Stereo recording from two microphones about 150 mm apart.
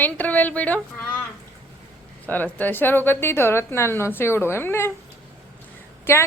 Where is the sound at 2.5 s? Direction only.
10° left (ahead or behind).